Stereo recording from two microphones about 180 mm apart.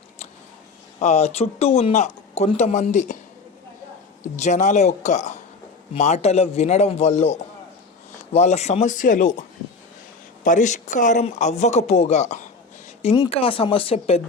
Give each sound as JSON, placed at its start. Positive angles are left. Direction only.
{"t": 0.9, "sound": "speech", "side_deg": 35}
{"t": 4.4, "sound": "speech", "side_deg": 40}
{"t": 10.4, "sound": "speech", "side_deg": 45}
{"t": 13.1, "sound": "speech", "side_deg": 25}